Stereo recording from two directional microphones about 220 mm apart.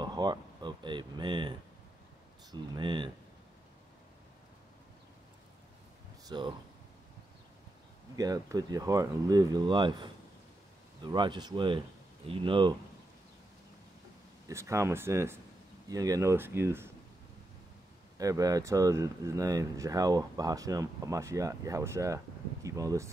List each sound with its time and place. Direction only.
0.0 s a sound: 20° right (ahead or behind)
2.5 s speech: 20° right (ahead or behind)
6.2 s speech: 20° right (ahead or behind)
8.2 s speech: 15° right (ahead or behind)
14.5 s speech: 15° right (ahead or behind)
18.1 s speech: 15° right (ahead or behind)